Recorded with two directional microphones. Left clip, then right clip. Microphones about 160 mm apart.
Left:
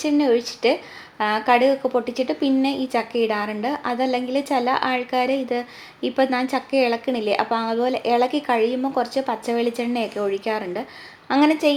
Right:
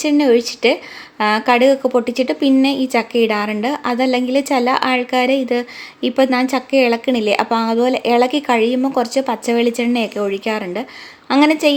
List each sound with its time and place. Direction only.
0.0 s a woman's voice: 40° right (ahead or behind)